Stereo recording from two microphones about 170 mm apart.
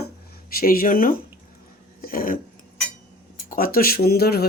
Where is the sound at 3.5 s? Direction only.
60° left (ahead or behind).